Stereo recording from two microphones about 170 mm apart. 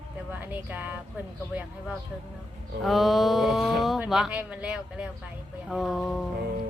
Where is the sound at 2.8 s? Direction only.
Centre (ahead or behind).